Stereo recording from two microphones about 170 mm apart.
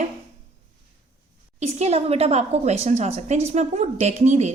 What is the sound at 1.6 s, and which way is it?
A woman's voice, 40° right (ahead or behind).